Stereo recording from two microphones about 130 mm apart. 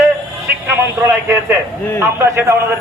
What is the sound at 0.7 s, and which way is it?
A man's voice, 20° right (ahead or behind).